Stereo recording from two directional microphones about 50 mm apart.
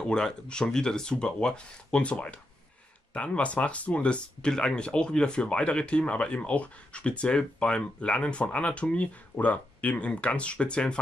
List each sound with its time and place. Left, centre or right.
0.0 s speech: centre